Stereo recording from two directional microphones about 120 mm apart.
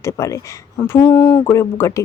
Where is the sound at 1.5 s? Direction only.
20° left (ahead or behind).